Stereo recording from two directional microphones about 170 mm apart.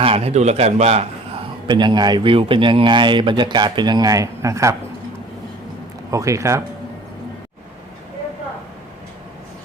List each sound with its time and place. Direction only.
0.0 s a man's voice: 35° right (ahead or behind)
1.6 s a man's voice: 25° right (ahead or behind)
6.1 s a man's voice: 20° right (ahead or behind)